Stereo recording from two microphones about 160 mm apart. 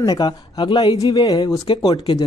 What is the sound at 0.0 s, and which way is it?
Speech, 25° left (ahead or behind).